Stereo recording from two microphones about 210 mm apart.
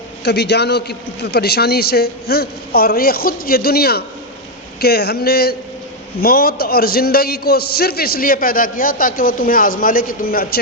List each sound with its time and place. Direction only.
0.3 s a man's voice: 55° left (ahead or behind)